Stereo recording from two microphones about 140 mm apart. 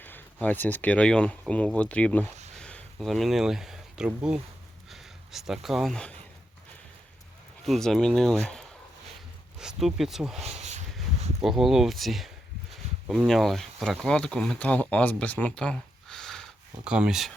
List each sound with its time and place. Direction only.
0.0 s speech: 10° left (ahead or behind)
7.6 s speech: 5° left (ahead or behind)
10.4 s a sound: 55° right (ahead or behind)
11.4 s speech: 5° right (ahead or behind)
16.8 s speech: 5° right (ahead or behind)